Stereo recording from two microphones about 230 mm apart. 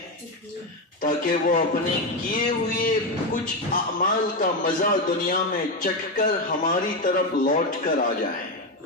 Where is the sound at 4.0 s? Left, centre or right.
Left.